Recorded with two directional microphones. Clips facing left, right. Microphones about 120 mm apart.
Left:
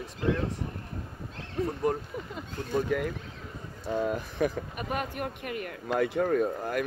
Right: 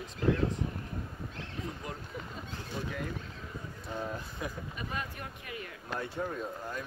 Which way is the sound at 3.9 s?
85° left.